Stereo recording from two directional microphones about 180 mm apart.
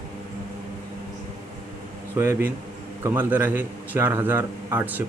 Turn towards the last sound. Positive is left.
turn(degrees=-10)  # may be behind; listen again after turning